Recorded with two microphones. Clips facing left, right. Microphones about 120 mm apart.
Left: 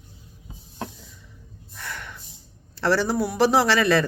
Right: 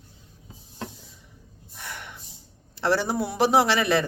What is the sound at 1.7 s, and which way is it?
Gasp, 20° right (ahead or behind).